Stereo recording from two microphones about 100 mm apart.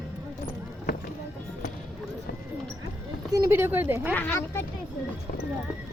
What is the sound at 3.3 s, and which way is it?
Speech, 25° right (ahead or behind).